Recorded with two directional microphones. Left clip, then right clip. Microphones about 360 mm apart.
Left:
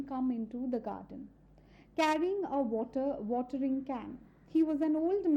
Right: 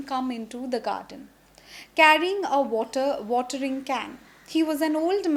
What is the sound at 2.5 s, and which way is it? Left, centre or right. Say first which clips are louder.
Speech: right 10 dB; centre.